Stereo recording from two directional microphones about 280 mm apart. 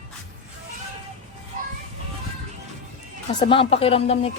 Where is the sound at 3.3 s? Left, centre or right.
Centre.